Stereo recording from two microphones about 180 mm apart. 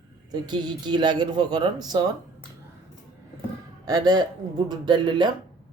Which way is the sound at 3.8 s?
20° right (ahead or behind).